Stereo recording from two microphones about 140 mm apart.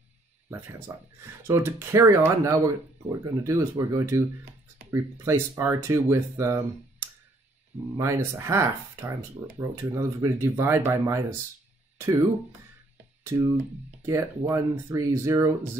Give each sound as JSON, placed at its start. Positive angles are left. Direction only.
{"t": 0.5, "sound": "speech", "side_deg": -15}
{"t": 8.0, "sound": "speech", "side_deg": -20}
{"t": 13.2, "sound": "speech", "side_deg": -20}